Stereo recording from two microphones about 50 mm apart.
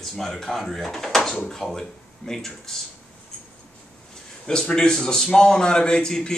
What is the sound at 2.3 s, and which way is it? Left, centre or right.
Speech, centre.